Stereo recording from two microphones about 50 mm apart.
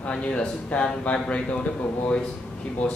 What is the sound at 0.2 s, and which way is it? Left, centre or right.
Speech, left.